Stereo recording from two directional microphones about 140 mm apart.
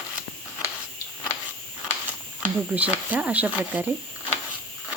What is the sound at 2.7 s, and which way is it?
Speech, 10° right (ahead or behind).